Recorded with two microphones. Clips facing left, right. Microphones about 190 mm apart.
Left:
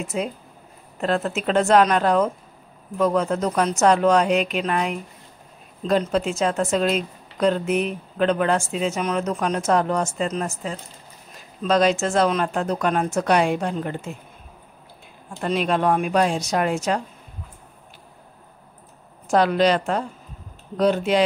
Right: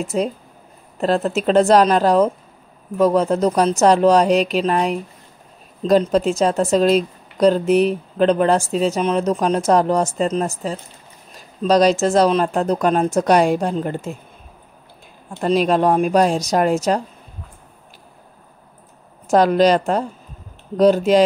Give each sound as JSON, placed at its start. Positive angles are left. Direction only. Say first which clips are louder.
{"t": 0.0, "sound": "a woman's voice", "louder": "right 5 dB", "side_deg": -35}
{"t": 15.4, "sound": "a woman's voice", "louder": "right 5 dB", "side_deg": -40}
{"t": 19.3, "sound": "a woman's voice", "louder": "right 4 dB", "side_deg": -40}